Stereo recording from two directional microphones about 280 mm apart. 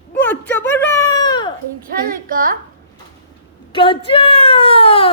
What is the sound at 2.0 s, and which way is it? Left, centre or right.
Speech, right.